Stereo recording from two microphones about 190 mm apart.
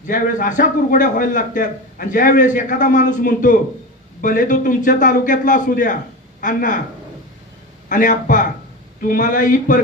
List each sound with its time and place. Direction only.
0.0 s a man's voice: 45° left (ahead or behind)
7.9 s a man's voice: 45° left (ahead or behind)